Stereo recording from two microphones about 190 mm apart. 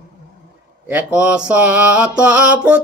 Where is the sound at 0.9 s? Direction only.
10° right (ahead or behind).